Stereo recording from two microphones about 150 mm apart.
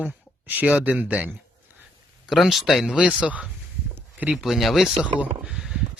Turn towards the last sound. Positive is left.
turn(degrees=-5)  # may be behind; listen again after turning